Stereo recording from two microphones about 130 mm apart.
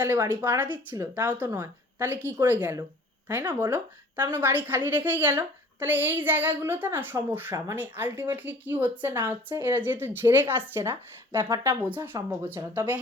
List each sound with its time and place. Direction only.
0.0 s a child's voice: 15° right (ahead or behind)
4.3 s a child's voice: 15° right (ahead or behind)